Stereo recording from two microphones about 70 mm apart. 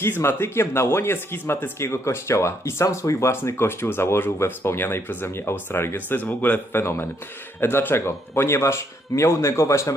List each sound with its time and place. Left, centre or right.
0.0 s a man's voice: left